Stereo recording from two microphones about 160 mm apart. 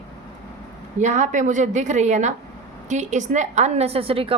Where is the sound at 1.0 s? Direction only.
50° right (ahead or behind).